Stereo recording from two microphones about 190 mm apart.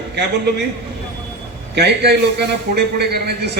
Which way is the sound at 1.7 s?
60° right (ahead or behind).